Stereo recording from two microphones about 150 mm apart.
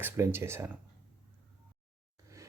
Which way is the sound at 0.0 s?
15° right (ahead or behind).